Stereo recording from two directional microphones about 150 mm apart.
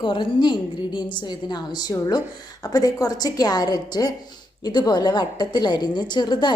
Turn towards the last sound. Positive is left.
turn(degrees=30)  # may be behind; listen again after turning